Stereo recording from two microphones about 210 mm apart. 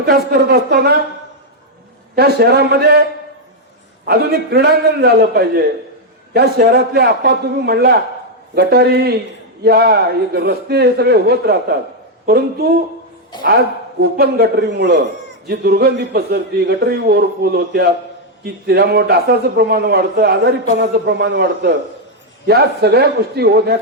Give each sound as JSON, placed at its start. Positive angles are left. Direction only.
{"t": 0.0, "sound": "a man's voice", "side_deg": -50}
{"t": 2.1, "sound": "a man's voice", "side_deg": -50}
{"t": 4.0, "sound": "a man's voice", "side_deg": -45}